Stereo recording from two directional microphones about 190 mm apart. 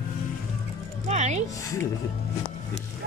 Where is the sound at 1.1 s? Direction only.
35° right (ahead or behind).